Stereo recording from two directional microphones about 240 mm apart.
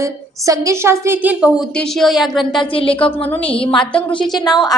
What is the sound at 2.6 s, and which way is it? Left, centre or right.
Speech, left.